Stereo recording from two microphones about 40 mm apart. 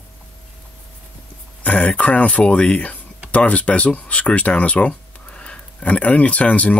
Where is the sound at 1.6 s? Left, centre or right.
Left.